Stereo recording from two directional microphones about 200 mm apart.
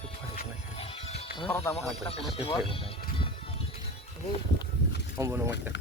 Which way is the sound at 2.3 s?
30° left (ahead or behind).